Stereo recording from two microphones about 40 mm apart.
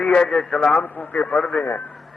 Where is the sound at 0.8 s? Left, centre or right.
Left.